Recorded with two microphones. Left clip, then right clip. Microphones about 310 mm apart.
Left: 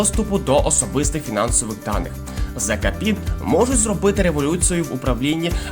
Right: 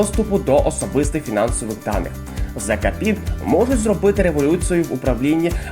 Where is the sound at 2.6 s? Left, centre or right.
Left.